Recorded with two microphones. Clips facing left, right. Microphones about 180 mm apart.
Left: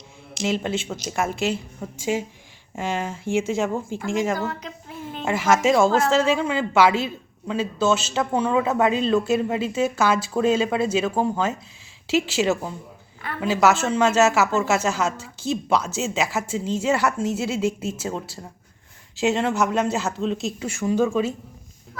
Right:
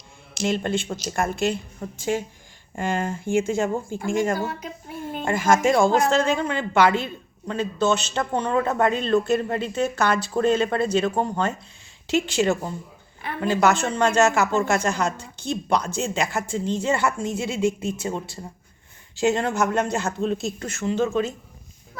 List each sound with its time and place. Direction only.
0.4 s a man's voice: 5° left (ahead or behind)